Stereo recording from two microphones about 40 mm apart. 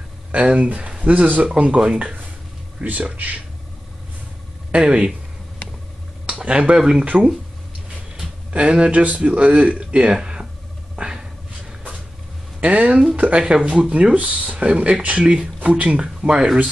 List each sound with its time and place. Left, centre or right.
0.3 s speech: right
2.0 s speech: right
4.7 s speech: right
6.2 s speech: right
8.5 s speech: right
11.0 s a sound: centre
12.5 s speech: right
13.4 s speech: right
15.6 s speech: right
16.2 s speech: centre